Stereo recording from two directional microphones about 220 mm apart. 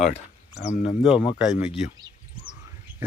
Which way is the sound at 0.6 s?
30° left (ahead or behind).